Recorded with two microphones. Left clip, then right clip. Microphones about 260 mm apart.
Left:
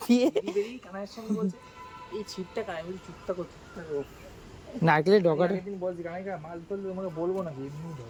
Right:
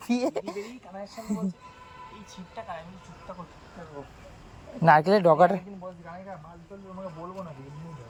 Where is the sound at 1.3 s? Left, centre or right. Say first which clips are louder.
Left 3 dB; right.